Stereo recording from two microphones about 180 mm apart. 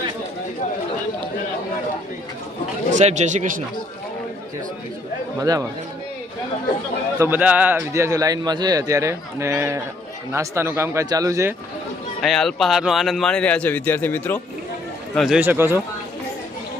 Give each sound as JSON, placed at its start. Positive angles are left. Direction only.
{"t": 2.9, "sound": "speech", "side_deg": -40}
{"t": 5.4, "sound": "speech", "side_deg": -20}
{"t": 7.2, "sound": "a man's voice", "side_deg": -10}
{"t": 12.2, "sound": "a man's voice", "side_deg": 0}
{"t": 15.4, "sound": "a man's voice", "side_deg": -10}